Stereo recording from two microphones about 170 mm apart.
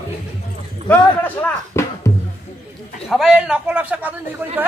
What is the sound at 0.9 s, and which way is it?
Music, 10° left (ahead or behind).